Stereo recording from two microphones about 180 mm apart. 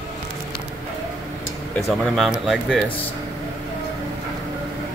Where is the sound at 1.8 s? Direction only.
Centre (ahead or behind).